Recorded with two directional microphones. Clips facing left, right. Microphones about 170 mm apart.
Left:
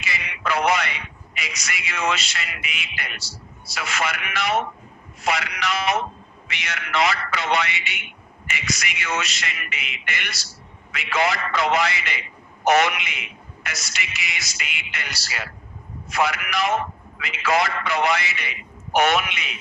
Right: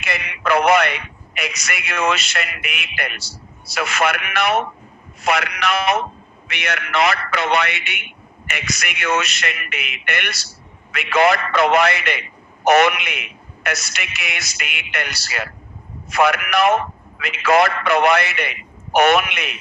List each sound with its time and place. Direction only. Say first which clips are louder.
0.0 s a man's voice: right 5 dB; 60° right (ahead or behind)